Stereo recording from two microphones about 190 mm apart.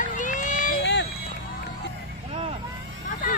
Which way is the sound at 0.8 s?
65° left (ahead or behind).